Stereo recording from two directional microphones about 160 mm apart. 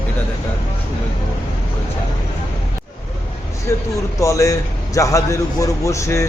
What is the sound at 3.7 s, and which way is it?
A man's voice, 15° left (ahead or behind).